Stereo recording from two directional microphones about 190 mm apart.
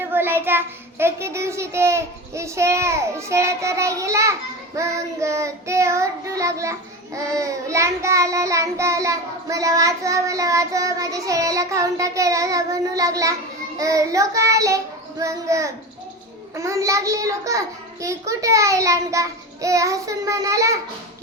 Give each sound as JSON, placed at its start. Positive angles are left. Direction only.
{"t": 0.0, "sound": "child singing", "side_deg": -10}